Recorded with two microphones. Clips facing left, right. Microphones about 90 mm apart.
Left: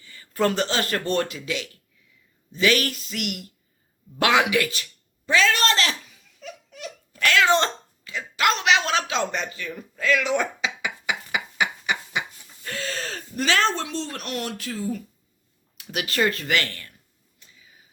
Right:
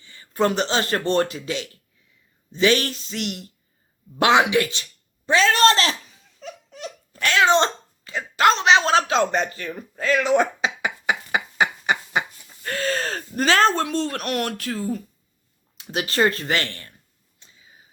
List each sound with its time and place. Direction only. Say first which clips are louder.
0.0 s a woman's voice: right 2 dB; 25° right (ahead or behind)
4.2 s a sound: right 3 dB; 25° right (ahead or behind)
8.0 s a sound: right 5 dB; 35° right (ahead or behind)
12.6 s speech: right 6 dB; 50° right (ahead or behind)
15.8 s speech: right 3 dB; 30° right (ahead or behind)
17.4 s whispering: right 1 dB; 25° right (ahead or behind)